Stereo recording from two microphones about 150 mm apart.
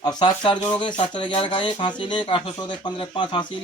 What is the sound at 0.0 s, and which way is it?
Speech, 25° left (ahead or behind).